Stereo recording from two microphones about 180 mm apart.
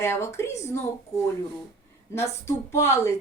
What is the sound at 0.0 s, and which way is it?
Speech, 15° left (ahead or behind).